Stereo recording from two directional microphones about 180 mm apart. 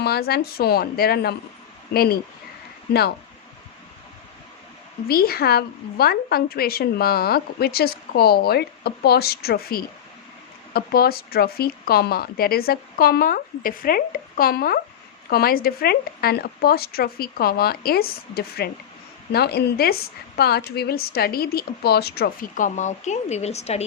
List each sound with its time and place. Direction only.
0.0 s a woman's voice: 60° left (ahead or behind)
5.0 s a woman's voice: 60° left (ahead or behind); by 23.8 s 35° left (ahead or behind)